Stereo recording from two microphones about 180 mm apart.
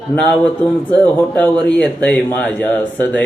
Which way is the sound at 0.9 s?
10° left (ahead or behind).